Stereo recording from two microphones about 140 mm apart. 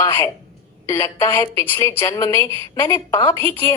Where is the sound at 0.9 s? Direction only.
15° left (ahead or behind).